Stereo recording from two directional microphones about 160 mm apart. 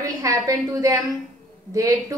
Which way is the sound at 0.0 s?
20° right (ahead or behind).